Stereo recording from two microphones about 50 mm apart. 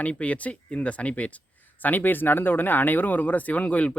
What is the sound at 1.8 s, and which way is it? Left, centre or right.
Speech, left.